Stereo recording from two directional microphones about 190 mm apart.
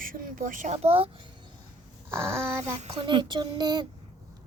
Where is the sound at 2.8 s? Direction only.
25° right (ahead or behind).